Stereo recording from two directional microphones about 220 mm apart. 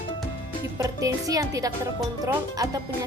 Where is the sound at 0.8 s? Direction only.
15° right (ahead or behind).